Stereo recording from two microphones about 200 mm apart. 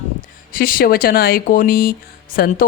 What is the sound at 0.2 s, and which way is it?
Speech, 45° left (ahead or behind).